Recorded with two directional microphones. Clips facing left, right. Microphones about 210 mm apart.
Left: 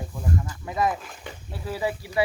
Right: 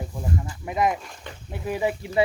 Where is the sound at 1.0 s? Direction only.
Centre (ahead or behind).